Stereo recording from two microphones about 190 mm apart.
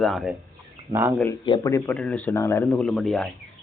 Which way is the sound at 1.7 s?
10° left (ahead or behind).